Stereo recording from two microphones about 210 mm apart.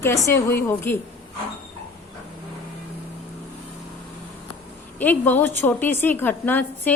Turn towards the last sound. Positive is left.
turn(degrees=10)  # may be behind; listen again after turning